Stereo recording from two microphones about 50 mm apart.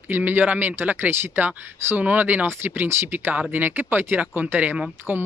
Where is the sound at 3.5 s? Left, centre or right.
Right.